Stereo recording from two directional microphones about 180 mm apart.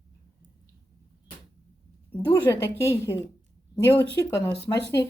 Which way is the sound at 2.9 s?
15° left (ahead or behind).